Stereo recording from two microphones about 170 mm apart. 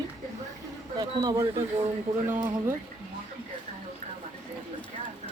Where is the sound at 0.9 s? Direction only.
25° right (ahead or behind).